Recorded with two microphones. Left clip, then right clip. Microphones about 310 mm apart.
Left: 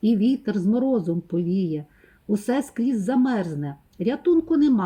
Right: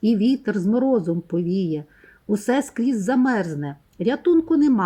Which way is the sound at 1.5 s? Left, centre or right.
Centre.